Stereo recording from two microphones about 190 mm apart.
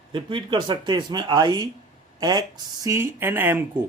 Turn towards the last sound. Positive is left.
turn(degrees=-10)  # may be behind; listen again after turning